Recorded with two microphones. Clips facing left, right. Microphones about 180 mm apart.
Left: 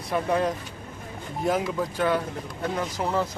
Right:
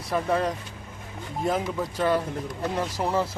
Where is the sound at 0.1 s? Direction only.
Centre (ahead or behind).